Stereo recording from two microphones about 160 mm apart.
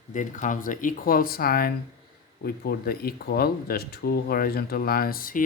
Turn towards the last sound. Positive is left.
turn(degrees=60)  # may be behind; listen again after turning